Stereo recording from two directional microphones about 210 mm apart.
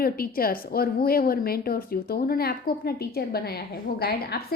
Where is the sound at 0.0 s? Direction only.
45° left (ahead or behind).